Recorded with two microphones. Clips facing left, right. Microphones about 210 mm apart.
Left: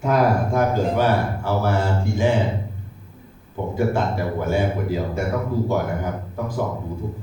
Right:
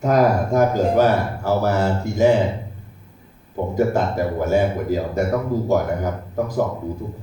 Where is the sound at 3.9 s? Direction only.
40° right (ahead or behind).